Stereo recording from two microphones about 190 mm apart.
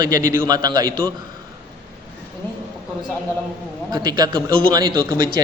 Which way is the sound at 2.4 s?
10° left (ahead or behind).